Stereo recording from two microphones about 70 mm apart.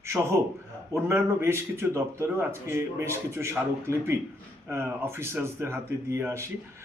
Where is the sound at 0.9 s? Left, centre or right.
Right.